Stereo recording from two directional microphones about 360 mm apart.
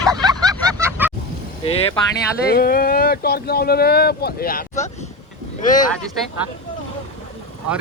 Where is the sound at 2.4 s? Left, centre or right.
Left.